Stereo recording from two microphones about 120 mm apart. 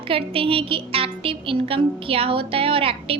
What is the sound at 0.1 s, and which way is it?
A woman's voice, 50° right (ahead or behind).